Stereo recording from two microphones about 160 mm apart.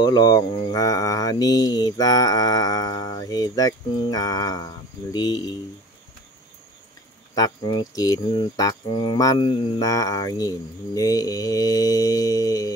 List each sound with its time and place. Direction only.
0.0 s mantra: 25° left (ahead or behind)
7.3 s mantra: 25° left (ahead or behind)